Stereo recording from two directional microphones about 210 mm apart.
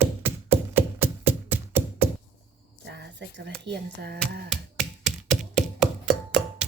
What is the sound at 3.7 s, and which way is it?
Speech, 50° right (ahead or behind).